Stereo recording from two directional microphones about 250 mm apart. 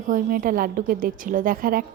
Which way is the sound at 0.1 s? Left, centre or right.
Right.